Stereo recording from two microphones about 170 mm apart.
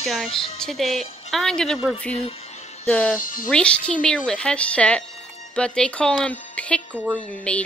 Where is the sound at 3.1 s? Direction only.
55° left (ahead or behind).